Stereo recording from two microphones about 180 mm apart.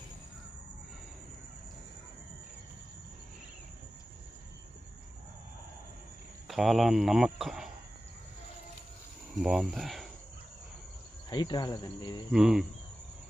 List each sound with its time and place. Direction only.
6.5 s speech: centre (ahead or behind)
9.4 s speech: 5° right (ahead or behind)
11.3 s cricket: 25° left (ahead or behind)
12.3 s speech: 5° right (ahead or behind)